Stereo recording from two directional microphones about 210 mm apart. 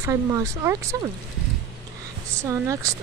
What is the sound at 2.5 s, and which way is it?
Speech, 15° right (ahead or behind).